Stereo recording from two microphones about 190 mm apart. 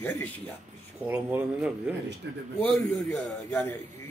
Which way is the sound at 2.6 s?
5° left (ahead or behind).